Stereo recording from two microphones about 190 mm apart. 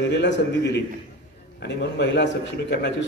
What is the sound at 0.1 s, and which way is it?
A man's voice, 65° left (ahead or behind).